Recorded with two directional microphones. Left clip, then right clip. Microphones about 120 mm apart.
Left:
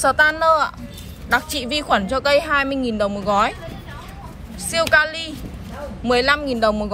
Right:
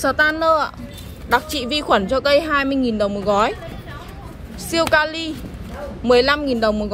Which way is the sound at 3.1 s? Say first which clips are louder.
Even; 25° right (ahead or behind).